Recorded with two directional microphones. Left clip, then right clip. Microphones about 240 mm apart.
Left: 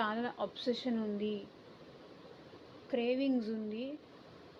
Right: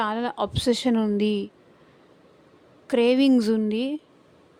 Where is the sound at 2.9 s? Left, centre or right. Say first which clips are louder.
Right 14 dB; right.